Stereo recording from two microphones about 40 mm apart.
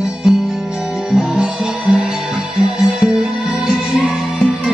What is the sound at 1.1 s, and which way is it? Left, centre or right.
Music, centre.